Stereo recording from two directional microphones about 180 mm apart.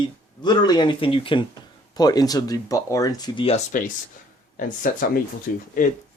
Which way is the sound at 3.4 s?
40° left (ahead or behind).